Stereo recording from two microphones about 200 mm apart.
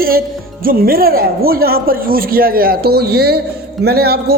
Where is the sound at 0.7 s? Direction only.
50° right (ahead or behind).